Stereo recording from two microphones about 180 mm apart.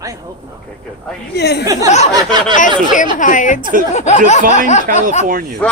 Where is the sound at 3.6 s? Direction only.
50° right (ahead or behind).